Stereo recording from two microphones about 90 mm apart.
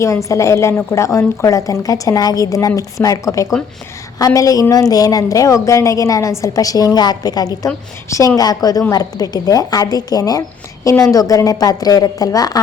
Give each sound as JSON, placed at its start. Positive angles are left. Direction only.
{"t": 0.0, "sound": "a woman's voice", "side_deg": 35}